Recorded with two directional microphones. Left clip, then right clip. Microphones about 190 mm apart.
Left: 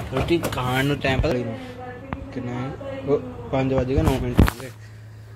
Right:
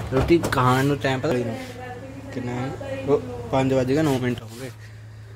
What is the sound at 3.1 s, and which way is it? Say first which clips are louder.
A man's voice: right 1 dB; 15° right (ahead or behind).